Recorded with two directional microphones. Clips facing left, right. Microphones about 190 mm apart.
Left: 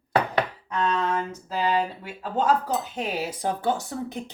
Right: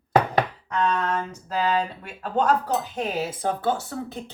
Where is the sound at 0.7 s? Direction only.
10° left (ahead or behind).